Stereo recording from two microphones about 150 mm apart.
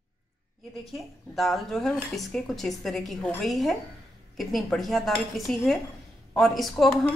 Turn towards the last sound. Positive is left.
turn(degrees=0)  # may be behind; listen again after turning